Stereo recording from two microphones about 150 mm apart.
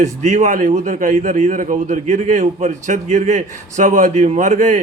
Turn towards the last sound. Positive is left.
turn(degrees=-55)  # may be behind; listen again after turning